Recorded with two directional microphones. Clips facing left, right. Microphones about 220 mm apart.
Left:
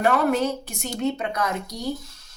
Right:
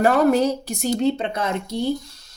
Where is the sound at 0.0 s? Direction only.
35° right (ahead or behind).